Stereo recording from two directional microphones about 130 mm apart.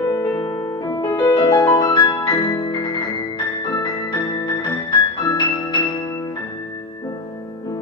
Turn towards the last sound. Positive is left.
turn(degrees=30)  # may be behind; listen again after turning